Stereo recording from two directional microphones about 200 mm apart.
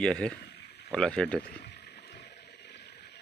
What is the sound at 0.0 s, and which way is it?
Speech, 5° left (ahead or behind).